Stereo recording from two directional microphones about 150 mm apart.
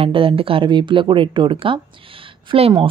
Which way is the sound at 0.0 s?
35° right (ahead or behind).